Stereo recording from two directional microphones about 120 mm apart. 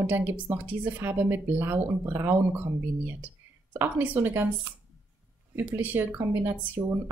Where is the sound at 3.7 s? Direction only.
15° right (ahead or behind).